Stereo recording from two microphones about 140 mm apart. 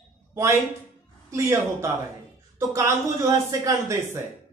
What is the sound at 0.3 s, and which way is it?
A woman's voice, 20° right (ahead or behind).